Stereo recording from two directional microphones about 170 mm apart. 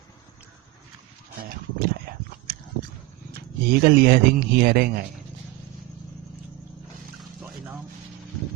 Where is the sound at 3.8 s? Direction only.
65° right (ahead or behind).